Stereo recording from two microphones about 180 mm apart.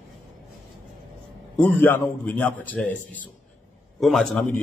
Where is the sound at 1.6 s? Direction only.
10° left (ahead or behind).